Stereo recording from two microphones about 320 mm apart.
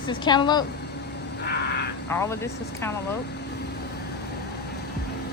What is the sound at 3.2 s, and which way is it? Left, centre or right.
Vehicle, left.